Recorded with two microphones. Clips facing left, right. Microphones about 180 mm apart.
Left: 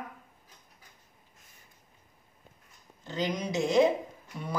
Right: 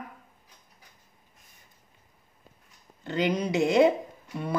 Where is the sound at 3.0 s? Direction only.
65° right (ahead or behind).